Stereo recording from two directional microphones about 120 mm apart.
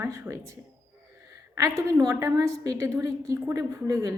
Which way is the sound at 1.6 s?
30° right (ahead or behind).